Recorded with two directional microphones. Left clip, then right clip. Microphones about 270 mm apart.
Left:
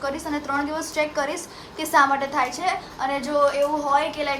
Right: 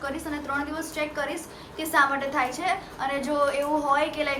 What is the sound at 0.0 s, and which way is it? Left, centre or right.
A woman's voice, left.